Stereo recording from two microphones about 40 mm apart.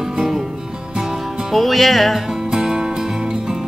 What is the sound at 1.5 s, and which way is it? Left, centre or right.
Music, centre.